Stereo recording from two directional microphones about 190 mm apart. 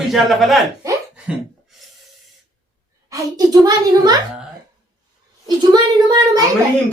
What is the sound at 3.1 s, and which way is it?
A child's voice, 20° right (ahead or behind).